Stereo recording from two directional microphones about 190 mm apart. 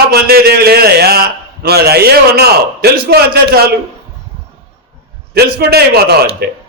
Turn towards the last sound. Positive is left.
turn(degrees=-55)  # may be behind; listen again after turning